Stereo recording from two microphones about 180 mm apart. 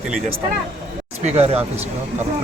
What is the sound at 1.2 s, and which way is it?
Speech, 35° right (ahead or behind).